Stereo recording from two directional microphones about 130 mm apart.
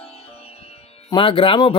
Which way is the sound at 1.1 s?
40° left (ahead or behind).